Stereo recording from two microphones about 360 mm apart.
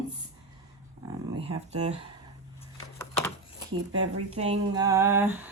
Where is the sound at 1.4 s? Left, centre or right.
Centre.